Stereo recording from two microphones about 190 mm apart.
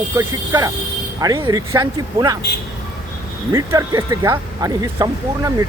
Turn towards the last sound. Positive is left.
turn(degrees=-15)  # may be behind; listen again after turning